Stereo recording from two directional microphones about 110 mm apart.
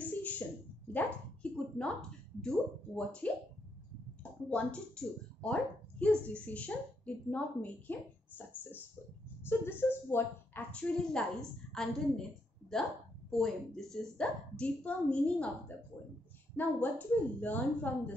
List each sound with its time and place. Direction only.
0.0 s a sound: 15° left (ahead or behind)
4.2 s a woman's voice: 10° left (ahead or behind)
10.7 s a woman's voice: 10° left (ahead or behind)
16.5 s speech: 15° left (ahead or behind)